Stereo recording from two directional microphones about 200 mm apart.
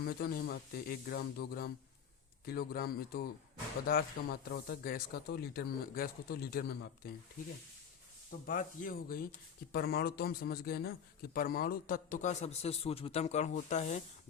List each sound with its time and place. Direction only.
0.0 s a man's voice: 50° left (ahead or behind)
8.4 s a man's voice: 45° left (ahead or behind)